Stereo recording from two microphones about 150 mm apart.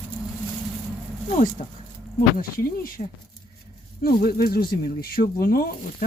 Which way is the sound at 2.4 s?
70° left (ahead or behind).